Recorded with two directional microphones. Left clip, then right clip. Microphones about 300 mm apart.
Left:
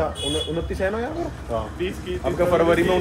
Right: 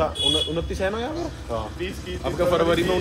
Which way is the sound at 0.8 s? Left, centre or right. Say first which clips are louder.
Left 2 dB; centre.